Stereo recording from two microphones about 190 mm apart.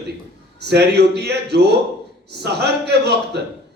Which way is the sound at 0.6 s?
60° right (ahead or behind).